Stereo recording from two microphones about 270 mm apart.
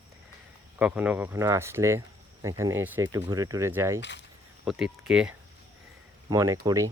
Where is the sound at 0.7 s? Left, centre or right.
Centre.